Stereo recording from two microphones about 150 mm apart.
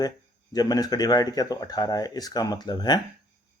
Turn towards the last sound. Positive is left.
turn(degrees=30)  # may be behind; listen again after turning